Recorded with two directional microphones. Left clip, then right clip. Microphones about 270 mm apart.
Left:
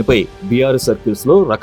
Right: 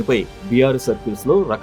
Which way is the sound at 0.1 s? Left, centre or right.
Left.